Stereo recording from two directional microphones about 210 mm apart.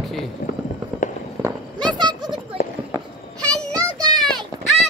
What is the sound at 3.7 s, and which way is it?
Child singing, 20° right (ahead or behind).